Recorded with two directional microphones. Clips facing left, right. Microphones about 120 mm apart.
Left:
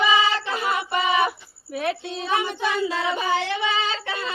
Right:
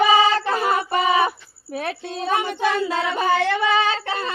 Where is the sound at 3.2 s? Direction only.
50° right (ahead or behind).